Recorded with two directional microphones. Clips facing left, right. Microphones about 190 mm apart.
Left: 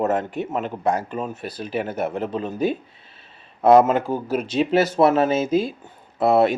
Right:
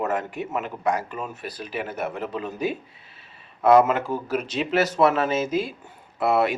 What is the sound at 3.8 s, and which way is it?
Speech, 35° left (ahead or behind).